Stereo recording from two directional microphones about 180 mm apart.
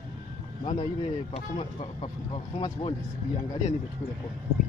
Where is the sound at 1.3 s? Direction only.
35° left (ahead or behind).